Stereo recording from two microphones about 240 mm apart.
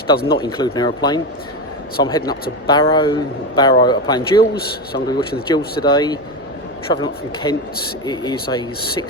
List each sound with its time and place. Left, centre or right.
0.3 s a man's voice: centre